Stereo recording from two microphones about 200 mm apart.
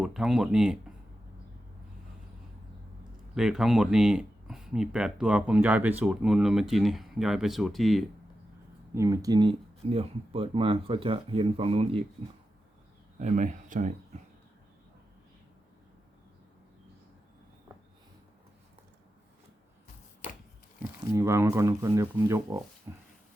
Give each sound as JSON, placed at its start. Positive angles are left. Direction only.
{"t": 0.0, "sound": "speech", "side_deg": 0}
{"t": 3.3, "sound": "speech", "side_deg": 0}
{"t": 9.0, "sound": "speech", "side_deg": -15}
{"t": 13.1, "sound": "speech", "side_deg": -40}
{"t": 21.1, "sound": "speech", "side_deg": -15}
{"t": 22.9, "sound": "a sound", "side_deg": -15}